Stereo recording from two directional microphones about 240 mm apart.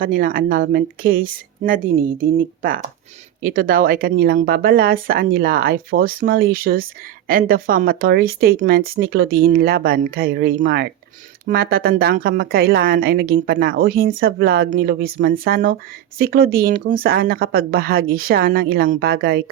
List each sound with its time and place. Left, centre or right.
0.0 s a woman's voice: right